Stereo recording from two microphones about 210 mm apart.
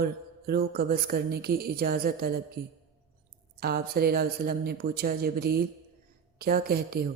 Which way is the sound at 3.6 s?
50° right (ahead or behind).